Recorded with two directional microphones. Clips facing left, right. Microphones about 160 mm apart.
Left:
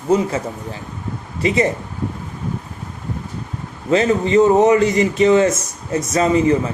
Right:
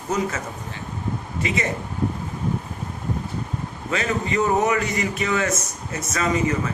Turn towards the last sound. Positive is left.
turn(degrees=30)  # may be behind; listen again after turning